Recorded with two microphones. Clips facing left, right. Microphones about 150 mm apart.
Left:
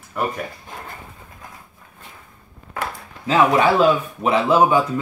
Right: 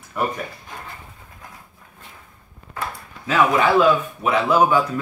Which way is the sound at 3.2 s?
30° left (ahead or behind).